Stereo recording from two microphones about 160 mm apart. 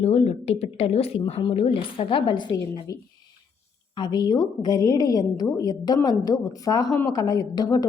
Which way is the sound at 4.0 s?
25° left (ahead or behind).